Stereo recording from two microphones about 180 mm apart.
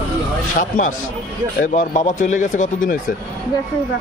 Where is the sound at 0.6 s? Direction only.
45° left (ahead or behind).